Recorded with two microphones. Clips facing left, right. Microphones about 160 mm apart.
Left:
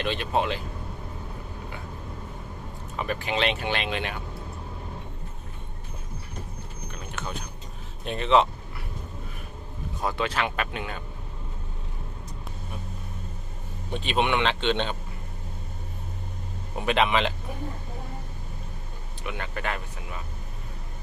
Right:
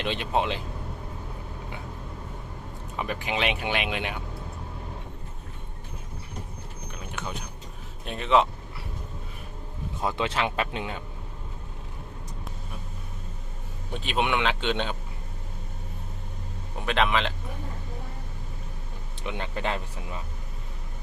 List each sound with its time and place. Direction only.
0.0 s speech: 20° right (ahead or behind)
2.9 s speech: 15° right (ahead or behind)
6.9 s a sound: 15° right (ahead or behind)
8.0 s speech: 5° right (ahead or behind)
10.0 s speech: 20° right (ahead or behind)
13.9 s speech: 5° right (ahead or behind)
16.7 s speech: 5° left (ahead or behind)
19.2 s speech: 25° right (ahead or behind)